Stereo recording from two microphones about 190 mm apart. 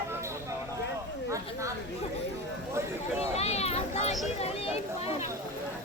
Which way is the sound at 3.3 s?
35° left (ahead or behind).